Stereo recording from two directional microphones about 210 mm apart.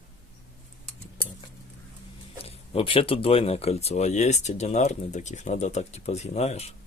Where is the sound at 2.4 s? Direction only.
25° left (ahead or behind).